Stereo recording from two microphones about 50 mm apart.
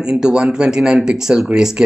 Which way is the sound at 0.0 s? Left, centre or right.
Centre.